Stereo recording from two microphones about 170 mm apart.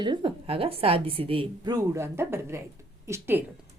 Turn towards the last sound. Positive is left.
turn(degrees=-15)  # may be behind; listen again after turning